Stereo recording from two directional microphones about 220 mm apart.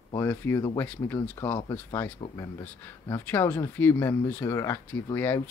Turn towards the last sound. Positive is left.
turn(degrees=10)  # may be behind; listen again after turning